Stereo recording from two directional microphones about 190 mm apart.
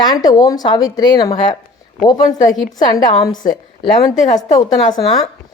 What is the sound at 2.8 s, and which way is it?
Speech, 20° left (ahead or behind).